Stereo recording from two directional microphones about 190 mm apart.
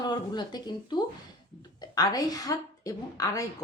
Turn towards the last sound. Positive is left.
turn(degrees=20)  # may be behind; listen again after turning